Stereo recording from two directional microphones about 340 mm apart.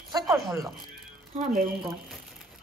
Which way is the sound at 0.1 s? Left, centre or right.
Centre.